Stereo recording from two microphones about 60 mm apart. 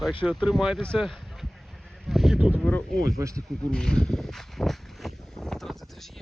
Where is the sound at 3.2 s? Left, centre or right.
Right.